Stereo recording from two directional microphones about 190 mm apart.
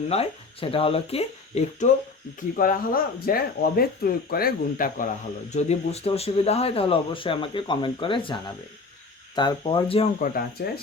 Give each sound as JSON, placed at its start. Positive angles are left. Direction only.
{"t": 0.1, "sound": "speech", "side_deg": 30}
{"t": 2.6, "sound": "speech", "side_deg": 50}
{"t": 10.2, "sound": "speech", "side_deg": 50}